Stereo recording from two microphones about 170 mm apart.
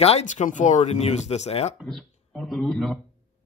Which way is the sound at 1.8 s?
Centre (ahead or behind).